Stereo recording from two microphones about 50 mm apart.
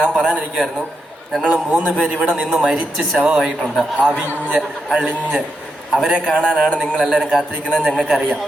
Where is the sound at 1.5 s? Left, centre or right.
Right.